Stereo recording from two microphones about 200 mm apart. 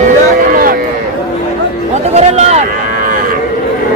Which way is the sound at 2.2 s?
30° right (ahead or behind).